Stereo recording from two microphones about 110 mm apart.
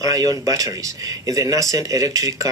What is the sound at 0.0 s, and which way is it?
Speech, 30° right (ahead or behind).